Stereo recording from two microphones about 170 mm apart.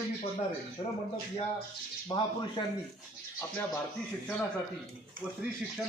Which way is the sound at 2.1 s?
25° left (ahead or behind).